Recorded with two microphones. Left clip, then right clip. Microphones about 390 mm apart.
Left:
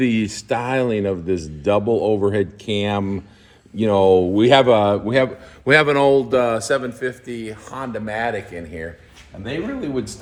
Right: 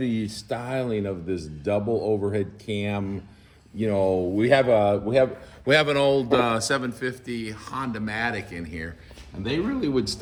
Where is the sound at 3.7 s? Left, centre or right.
Left.